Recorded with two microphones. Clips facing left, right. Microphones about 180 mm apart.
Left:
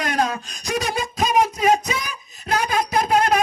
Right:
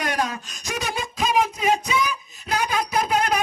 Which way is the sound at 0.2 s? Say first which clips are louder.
Left 4 dB; 35° left (ahead or behind).